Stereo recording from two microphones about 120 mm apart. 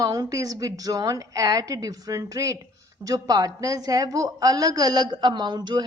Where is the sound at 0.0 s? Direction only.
30° right (ahead or behind).